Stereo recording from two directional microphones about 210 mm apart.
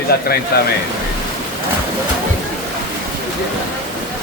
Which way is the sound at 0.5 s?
50° left (ahead or behind).